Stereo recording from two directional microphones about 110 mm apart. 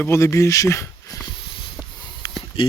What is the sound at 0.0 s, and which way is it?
Speech, 25° left (ahead or behind).